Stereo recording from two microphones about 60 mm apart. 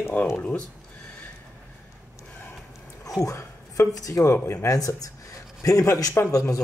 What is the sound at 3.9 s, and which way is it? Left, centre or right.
Speech, left.